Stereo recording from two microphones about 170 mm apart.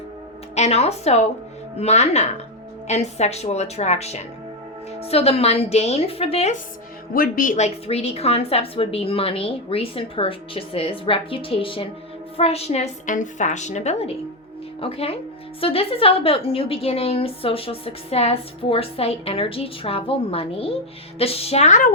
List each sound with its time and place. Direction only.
0.5 s a woman's voice: 40° left (ahead or behind)
7.1 s a woman's voice: 55° left (ahead or behind)